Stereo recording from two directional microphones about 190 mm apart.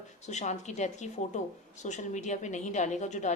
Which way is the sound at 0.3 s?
40° left (ahead or behind).